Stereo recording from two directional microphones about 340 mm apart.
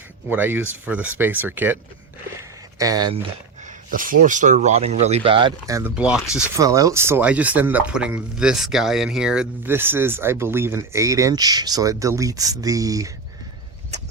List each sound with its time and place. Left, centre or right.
0.3 s speech: centre
3.6 s speech: right